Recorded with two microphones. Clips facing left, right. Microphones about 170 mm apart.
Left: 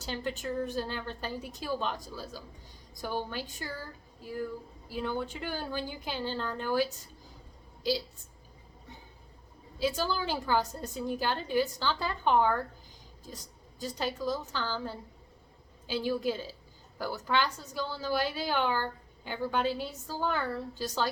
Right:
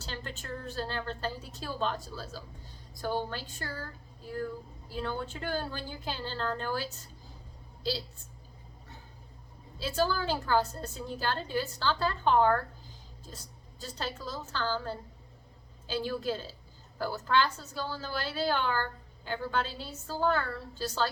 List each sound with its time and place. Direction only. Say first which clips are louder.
0.0 s a woman's voice: left 6 dB; 15° left (ahead or behind)
9.7 s a woman's voice: right 1 dB; 15° left (ahead or behind)